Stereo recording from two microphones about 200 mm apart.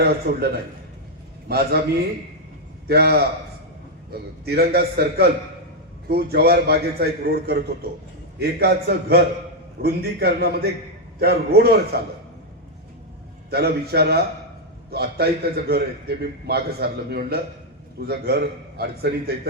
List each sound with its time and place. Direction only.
0.0 s a man's voice: 50° right (ahead or behind)
2.8 s a man's voice: 50° right (ahead or behind)
4.4 s a man's voice: 50° right (ahead or behind)
13.5 s a man's voice: 55° right (ahead or behind)